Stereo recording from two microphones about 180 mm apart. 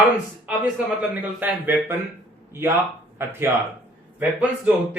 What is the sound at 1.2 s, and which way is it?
Speech, 10° right (ahead or behind).